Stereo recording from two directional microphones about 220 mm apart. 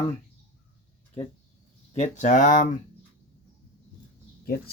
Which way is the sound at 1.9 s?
30° left (ahead or behind).